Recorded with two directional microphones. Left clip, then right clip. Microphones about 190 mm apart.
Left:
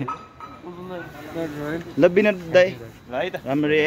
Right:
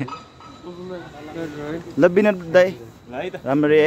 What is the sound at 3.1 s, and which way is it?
Speech, 15° left (ahead or behind).